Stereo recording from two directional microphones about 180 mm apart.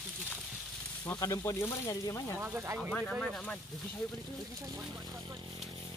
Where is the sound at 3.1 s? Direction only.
Centre (ahead or behind).